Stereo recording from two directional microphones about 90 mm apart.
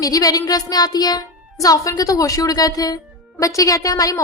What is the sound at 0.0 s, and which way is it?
A woman's voice, 40° left (ahead or behind).